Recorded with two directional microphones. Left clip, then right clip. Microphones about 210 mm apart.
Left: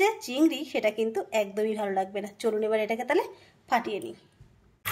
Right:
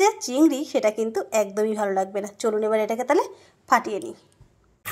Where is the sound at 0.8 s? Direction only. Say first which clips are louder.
Right 4 dB; 15° right (ahead or behind).